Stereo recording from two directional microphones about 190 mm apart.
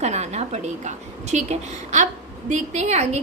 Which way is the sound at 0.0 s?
35° right (ahead or behind).